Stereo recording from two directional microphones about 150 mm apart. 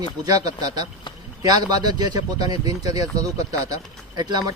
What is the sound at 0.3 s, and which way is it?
Speech, 25° right (ahead or behind).